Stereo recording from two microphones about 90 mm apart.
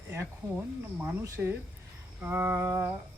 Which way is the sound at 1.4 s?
15° right (ahead or behind).